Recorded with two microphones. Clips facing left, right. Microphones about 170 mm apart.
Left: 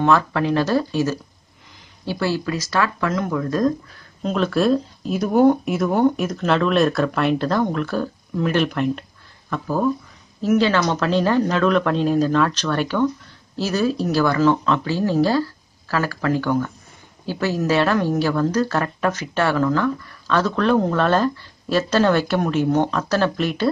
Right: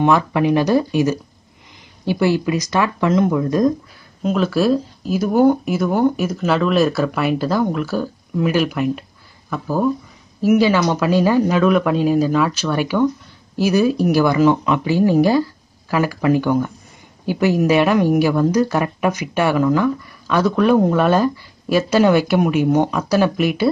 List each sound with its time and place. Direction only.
0.0 s speech: 15° right (ahead or behind)
4.2 s speech: 5° right (ahead or behind)